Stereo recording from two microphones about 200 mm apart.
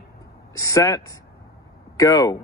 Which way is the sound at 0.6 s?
15° left (ahead or behind).